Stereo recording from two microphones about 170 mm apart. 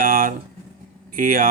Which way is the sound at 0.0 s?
55° right (ahead or behind).